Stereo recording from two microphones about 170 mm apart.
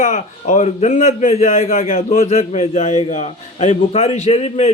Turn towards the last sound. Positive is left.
turn(degrees=40)  # may be behind; listen again after turning